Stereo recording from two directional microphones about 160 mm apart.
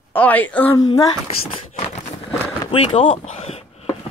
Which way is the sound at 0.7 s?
25° left (ahead or behind).